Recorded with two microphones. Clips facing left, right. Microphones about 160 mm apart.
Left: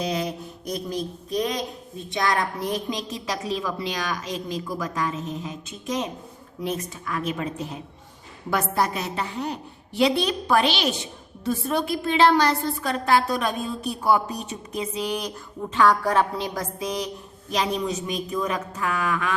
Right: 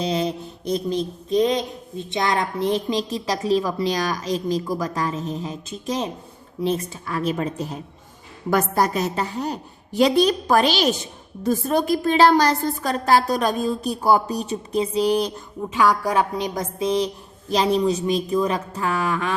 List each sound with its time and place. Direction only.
0.0 s a sound: 30° right (ahead or behind)
2.0 s a woman's voice: 25° right (ahead or behind)
15.7 s a woman's voice: 10° right (ahead or behind); by 19.3 s 30° right (ahead or behind)